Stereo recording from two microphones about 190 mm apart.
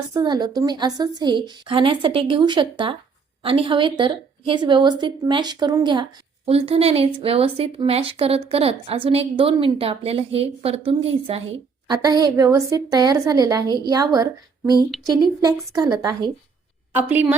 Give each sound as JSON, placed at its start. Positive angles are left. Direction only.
{"t": 0.1, "sound": "a woman's voice", "side_deg": -20}